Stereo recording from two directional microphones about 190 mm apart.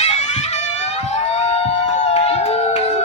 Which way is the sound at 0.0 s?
35° left (ahead or behind).